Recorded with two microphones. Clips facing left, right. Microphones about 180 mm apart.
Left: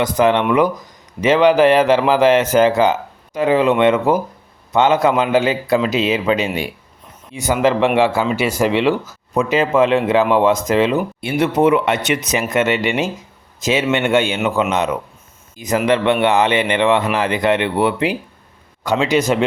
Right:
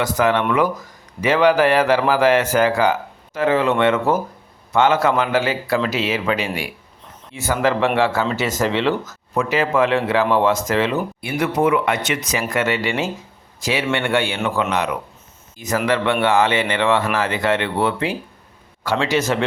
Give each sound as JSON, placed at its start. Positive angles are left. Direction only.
{"t": 0.0, "sound": "a man's voice", "side_deg": 20}